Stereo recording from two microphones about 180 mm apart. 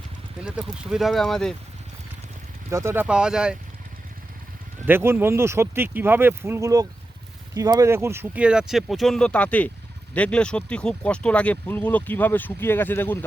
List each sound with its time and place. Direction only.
0.4 s speech: 5° right (ahead or behind)
2.6 s speech: 15° right (ahead or behind)
4.9 s speech: 10° right (ahead or behind); by 13.1 s 10° left (ahead or behind)